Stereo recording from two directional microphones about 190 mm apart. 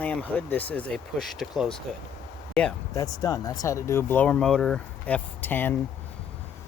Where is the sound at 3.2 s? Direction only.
20° left (ahead or behind).